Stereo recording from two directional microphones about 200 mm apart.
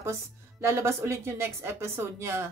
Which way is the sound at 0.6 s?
15° right (ahead or behind).